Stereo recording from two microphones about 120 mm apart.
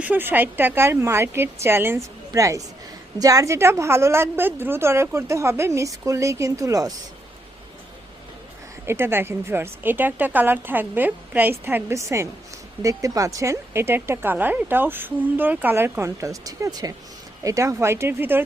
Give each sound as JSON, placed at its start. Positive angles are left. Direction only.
{"t": 0.0, "sound": "speech", "side_deg": -15}
{"t": 8.9, "sound": "a woman's voice", "side_deg": -20}